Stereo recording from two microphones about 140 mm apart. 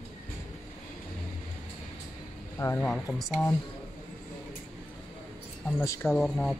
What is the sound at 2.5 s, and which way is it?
Speech, 20° left (ahead or behind).